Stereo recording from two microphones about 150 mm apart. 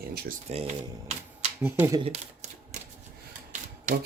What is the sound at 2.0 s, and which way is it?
Speech, 45° right (ahead or behind).